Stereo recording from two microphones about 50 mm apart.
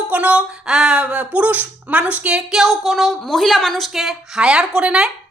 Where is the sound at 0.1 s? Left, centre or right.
Right.